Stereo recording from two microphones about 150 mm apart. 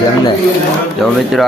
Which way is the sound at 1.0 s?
Centre (ahead or behind).